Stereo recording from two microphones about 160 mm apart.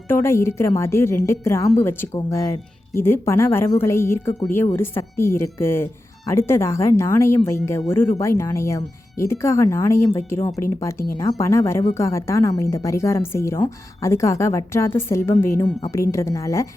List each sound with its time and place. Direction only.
0.1 s a woman's voice: 15° left (ahead or behind)